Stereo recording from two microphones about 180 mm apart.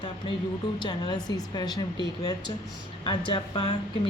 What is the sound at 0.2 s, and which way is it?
A woman's voice, 25° left (ahead or behind).